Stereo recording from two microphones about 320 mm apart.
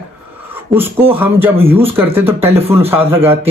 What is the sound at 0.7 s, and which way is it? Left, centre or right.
Speech, centre.